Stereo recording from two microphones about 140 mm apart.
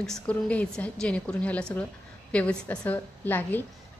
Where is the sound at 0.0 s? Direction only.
5° left (ahead or behind).